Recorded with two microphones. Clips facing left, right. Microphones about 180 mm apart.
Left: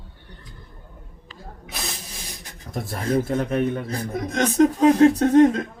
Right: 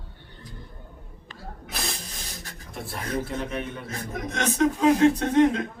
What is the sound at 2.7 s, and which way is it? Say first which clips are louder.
A man's voice: left 7 dB; 45° left (ahead or behind).